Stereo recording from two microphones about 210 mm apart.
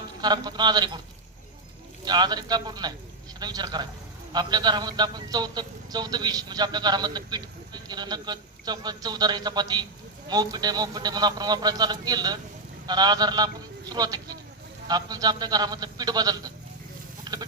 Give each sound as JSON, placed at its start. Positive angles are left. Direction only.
{"t": 0.2, "sound": "a man's voice", "side_deg": -20}
{"t": 2.0, "sound": "a man's voice", "side_deg": -20}
{"t": 17.3, "sound": "a sound", "side_deg": -20}